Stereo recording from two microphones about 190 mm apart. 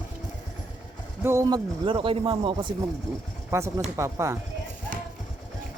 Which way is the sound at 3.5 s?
15° right (ahead or behind).